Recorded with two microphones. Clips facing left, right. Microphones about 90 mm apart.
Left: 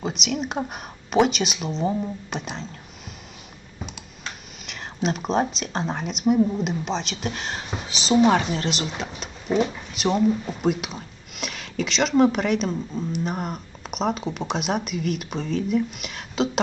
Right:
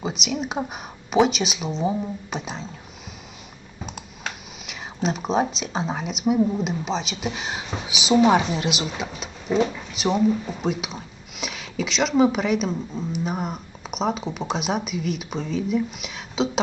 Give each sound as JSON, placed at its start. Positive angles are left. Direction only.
{"t": 0.0, "sound": "speech", "side_deg": 0}
{"t": 4.6, "sound": "speech", "side_deg": 0}